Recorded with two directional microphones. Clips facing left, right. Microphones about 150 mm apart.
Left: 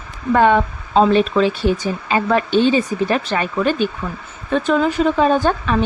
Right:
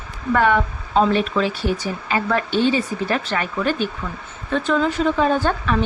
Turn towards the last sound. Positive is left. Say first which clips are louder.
# left 3 dB
turn(degrees=20)  # may be behind; listen again after turning